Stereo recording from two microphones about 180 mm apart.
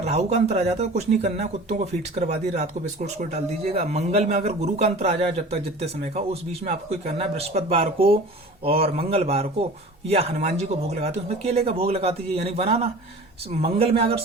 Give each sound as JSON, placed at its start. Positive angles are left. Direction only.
{"t": 0.0, "sound": "a man's voice", "side_deg": -35}